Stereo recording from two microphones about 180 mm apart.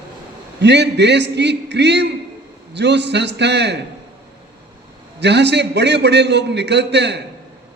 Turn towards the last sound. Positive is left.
turn(degrees=-70)  # may be behind; listen again after turning